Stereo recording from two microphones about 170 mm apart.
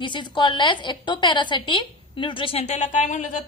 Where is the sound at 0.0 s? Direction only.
30° left (ahead or behind).